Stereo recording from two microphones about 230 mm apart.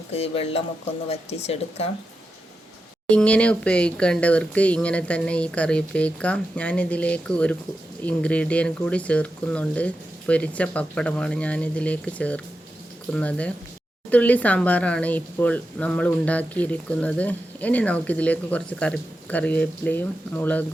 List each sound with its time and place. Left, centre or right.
0.1 s speech: left
3.1 s speech: centre